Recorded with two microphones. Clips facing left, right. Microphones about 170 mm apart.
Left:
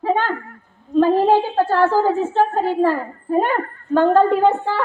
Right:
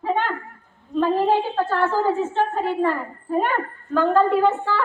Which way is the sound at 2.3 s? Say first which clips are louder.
Left 4 dB; 35° left (ahead or behind).